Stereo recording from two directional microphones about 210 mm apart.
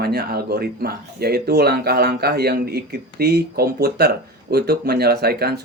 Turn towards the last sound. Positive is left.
turn(degrees=-50)  # may be behind; listen again after turning